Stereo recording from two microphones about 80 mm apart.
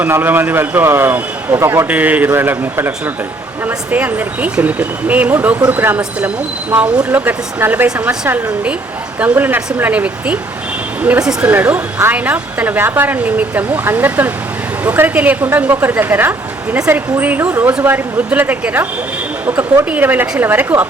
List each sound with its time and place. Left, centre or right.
0.0 s speech: right
1.9 s speech: right
9.2 s speech: right
11.2 s speech: centre
11.4 s speech: right